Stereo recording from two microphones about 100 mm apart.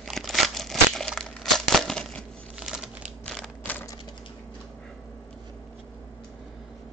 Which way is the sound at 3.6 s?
20° left (ahead or behind).